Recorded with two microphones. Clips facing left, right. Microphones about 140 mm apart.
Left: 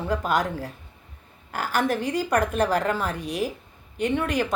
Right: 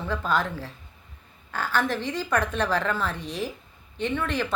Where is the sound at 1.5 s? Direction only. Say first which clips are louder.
Left 2 dB; 15° left (ahead or behind).